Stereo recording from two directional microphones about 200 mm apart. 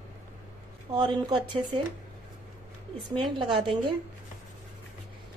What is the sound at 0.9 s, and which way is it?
Speech, 20° right (ahead or behind).